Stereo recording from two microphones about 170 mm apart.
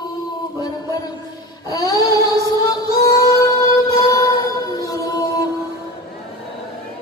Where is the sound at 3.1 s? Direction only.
20° left (ahead or behind).